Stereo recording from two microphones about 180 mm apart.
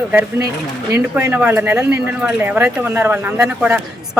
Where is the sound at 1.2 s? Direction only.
10° right (ahead or behind).